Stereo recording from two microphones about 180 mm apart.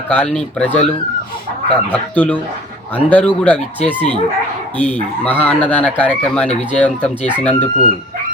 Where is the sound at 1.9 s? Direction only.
10° left (ahead or behind).